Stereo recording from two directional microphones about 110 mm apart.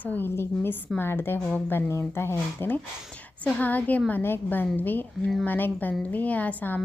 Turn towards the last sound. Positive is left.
turn(degrees=15)  # may be behind; listen again after turning